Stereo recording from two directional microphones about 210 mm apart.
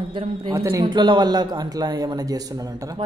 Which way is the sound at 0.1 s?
25° right (ahead or behind).